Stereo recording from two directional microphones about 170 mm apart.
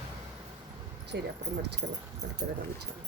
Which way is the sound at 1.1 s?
80° right.